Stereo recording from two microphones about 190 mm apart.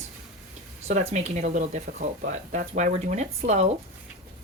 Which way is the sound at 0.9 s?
35° right (ahead or behind).